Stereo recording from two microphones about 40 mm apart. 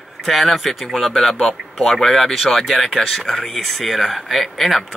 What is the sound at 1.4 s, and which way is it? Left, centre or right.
Speech, centre.